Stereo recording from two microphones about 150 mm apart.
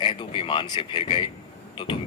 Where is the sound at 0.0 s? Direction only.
35° left (ahead or behind).